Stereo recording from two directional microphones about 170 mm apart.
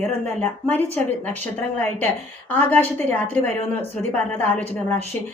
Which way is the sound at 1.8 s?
10° left (ahead or behind).